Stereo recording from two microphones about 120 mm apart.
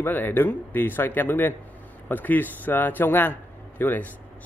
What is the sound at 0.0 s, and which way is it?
A man's voice, 15° left (ahead or behind).